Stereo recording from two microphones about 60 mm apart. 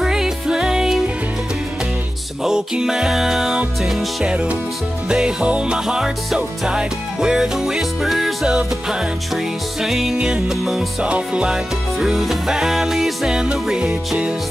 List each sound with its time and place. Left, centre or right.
0.0 s music: centre
2.4 s music: centre
4.2 s music: centre
8.5 s music: centre
10.1 s music: centre
10.5 s music: centre
11.0 s music: centre